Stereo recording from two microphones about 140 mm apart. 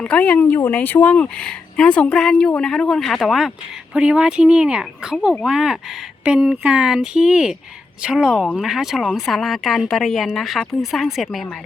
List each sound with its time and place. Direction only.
0.0 s a woman's voice: 10° left (ahead or behind)